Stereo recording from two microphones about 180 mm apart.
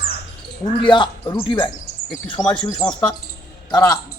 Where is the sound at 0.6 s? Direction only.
30° left (ahead or behind).